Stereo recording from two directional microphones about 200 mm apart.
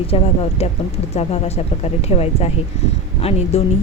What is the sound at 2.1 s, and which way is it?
Speech, 30° left (ahead or behind).